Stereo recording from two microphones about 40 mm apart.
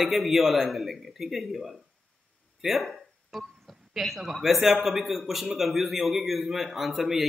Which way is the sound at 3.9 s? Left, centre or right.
Centre.